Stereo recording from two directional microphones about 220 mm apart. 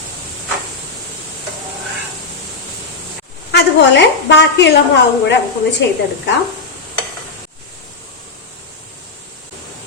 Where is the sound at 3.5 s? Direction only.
50° left (ahead or behind).